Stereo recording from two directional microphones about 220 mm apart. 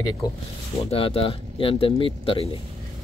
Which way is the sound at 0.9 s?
25° left (ahead or behind).